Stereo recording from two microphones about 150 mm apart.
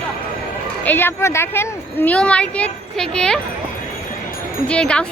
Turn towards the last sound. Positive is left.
turn(degrees=5)  # may be behind; listen again after turning